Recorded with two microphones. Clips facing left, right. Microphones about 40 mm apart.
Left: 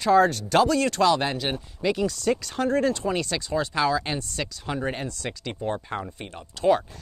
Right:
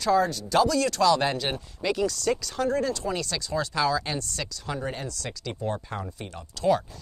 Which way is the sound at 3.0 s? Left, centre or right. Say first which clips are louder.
Left 3 dB; left.